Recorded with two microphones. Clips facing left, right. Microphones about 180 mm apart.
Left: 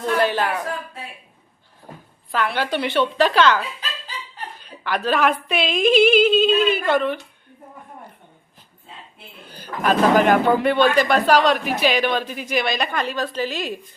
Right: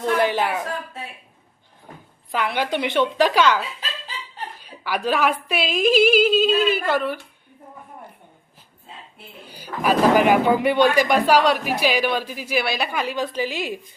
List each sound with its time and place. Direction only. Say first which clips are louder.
0.0 s speech: even; 15° right (ahead or behind)
2.3 s speech: left 1 dB; 15° right (ahead or behind)
4.6 s a woman's voice: left 1 dB; 10° right (ahead or behind)
9.5 s speech: even; 10° right (ahead or behind)